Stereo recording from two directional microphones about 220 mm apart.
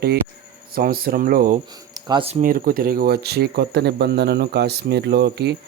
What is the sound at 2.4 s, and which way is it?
Speech, 40° right (ahead or behind).